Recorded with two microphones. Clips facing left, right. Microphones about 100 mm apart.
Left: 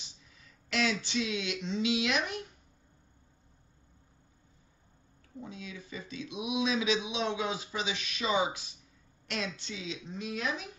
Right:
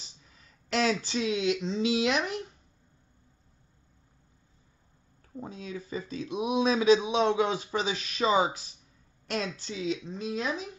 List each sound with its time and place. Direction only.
0.7 s speech: 40° right (ahead or behind)
5.4 s speech: 40° right (ahead or behind)